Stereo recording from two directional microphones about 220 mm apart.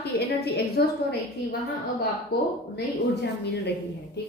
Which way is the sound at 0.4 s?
45° left (ahead or behind).